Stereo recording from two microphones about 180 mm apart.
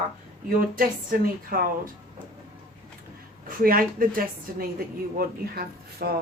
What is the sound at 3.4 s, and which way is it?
Speech, 50° right (ahead or behind).